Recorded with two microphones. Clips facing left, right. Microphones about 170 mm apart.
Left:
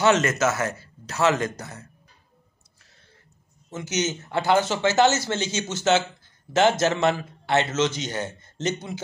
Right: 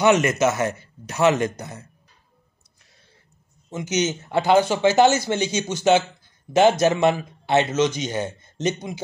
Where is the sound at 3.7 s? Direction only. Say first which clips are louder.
Right 3 dB; 15° right (ahead or behind).